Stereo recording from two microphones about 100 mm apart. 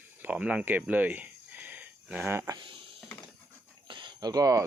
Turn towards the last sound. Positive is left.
turn(degrees=-35)  # may be behind; listen again after turning